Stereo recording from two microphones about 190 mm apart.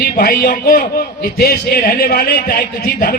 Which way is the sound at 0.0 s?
55° left (ahead or behind).